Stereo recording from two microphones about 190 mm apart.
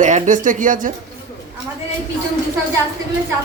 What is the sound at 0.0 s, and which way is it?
Speech, 40° right (ahead or behind).